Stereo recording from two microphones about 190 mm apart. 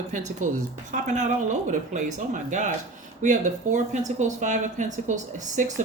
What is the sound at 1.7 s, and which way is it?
A woman's voice, 40° right (ahead or behind).